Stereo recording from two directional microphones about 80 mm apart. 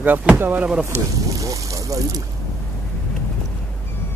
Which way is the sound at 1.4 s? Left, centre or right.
Right.